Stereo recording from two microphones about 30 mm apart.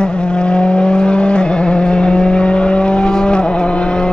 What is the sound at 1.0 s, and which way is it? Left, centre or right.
Vehicle, left.